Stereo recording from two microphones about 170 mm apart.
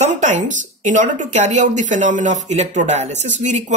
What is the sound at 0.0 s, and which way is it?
Speech, 45° right (ahead or behind).